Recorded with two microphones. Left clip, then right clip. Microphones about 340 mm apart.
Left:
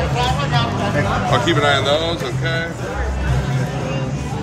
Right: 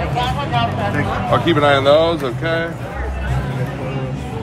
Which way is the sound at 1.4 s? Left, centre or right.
Centre.